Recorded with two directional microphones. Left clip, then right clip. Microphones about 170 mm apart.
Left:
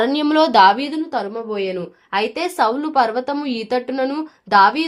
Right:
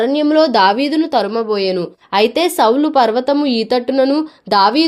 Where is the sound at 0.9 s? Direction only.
50° right (ahead or behind).